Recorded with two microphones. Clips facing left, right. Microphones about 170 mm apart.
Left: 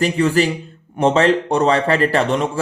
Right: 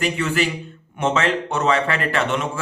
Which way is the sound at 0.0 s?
35° left (ahead or behind).